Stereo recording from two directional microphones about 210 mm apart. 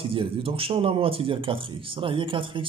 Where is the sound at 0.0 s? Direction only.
25° right (ahead or behind).